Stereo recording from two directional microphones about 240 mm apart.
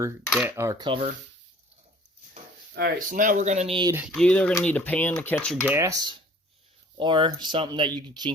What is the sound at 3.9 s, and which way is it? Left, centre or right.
Speech, centre.